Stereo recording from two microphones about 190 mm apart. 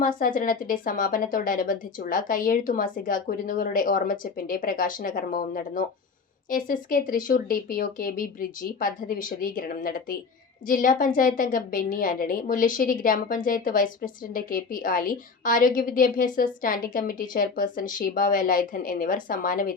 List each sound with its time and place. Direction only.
0.0 s a woman's voice: 45° left (ahead or behind)